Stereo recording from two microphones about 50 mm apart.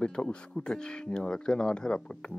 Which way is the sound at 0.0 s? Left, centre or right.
Left.